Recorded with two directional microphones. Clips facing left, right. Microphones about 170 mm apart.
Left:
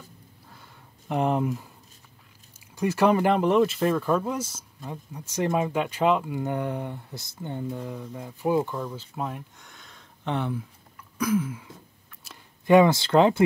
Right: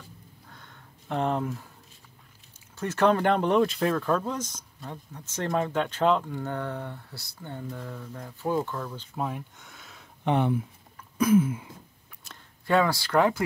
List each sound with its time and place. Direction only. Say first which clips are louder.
0.5 s a sound: even; 5° left (ahead or behind)
2.7 s speech: left 2 dB; 10° left (ahead or behind); by 10.0 s 5° right (ahead or behind)
10.2 s speech: right 4 dB; 15° right (ahead or behind)
11.1 s throat clearing: right 4 dB; 25° right (ahead or behind)
12.6 s speech: left 6 dB; 20° left (ahead or behind)